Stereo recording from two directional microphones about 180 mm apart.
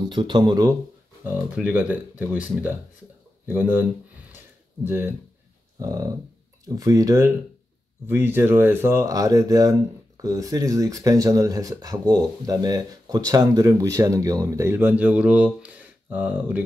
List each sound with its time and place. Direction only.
0.1 s speech: 25° right (ahead or behind)
1.2 s speech: 10° right (ahead or behind)
4.8 s speech: 10° right (ahead or behind)